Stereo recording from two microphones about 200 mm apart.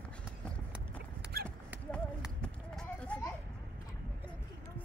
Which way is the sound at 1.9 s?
5° left (ahead or behind).